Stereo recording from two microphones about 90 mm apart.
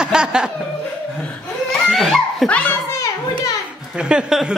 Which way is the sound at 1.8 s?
Centre (ahead or behind).